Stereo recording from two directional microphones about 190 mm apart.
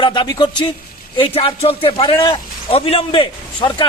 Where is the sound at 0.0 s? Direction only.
25° left (ahead or behind).